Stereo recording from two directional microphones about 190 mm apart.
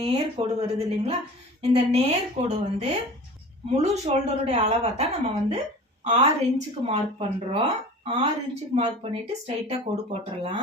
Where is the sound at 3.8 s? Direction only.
35° right (ahead or behind).